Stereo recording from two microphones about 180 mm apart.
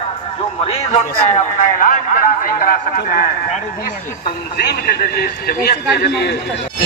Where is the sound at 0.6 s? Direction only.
35° left (ahead or behind); by 3.2 s 55° left (ahead or behind).